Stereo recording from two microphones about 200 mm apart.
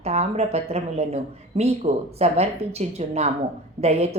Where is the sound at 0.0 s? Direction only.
30° right (ahead or behind).